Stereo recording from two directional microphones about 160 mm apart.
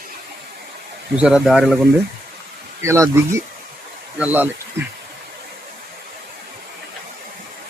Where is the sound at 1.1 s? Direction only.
5° right (ahead or behind).